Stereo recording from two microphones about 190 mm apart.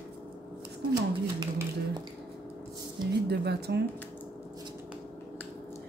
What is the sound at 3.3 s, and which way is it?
Speech, 60° right (ahead or behind).